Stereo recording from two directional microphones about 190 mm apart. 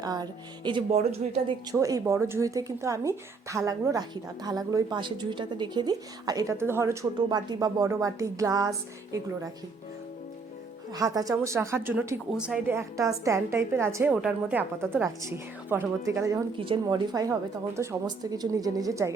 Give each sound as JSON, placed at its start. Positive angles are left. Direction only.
{"t": 0.0, "sound": "a woman's voice", "side_deg": -20}
{"t": 1.8, "sound": "a woman's voice", "side_deg": -15}
{"t": 10.9, "sound": "a woman's voice", "side_deg": -20}
{"t": 16.6, "sound": "a woman's voice", "side_deg": -25}